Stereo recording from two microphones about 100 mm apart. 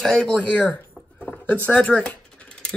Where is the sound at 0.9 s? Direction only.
10° left (ahead or behind).